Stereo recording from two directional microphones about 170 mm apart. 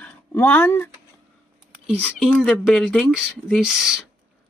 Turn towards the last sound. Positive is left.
turn(degrees=-5)  # may be behind; listen again after turning